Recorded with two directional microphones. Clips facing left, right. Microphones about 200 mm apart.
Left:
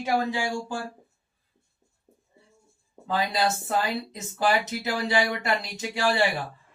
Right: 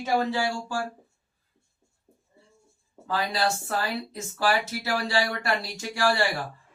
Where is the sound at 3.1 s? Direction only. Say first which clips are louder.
Left 1 dB; 20° left (ahead or behind).